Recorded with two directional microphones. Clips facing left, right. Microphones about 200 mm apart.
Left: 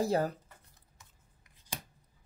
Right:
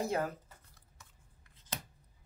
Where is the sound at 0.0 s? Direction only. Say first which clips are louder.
Left 4 dB; 35° left (ahead or behind).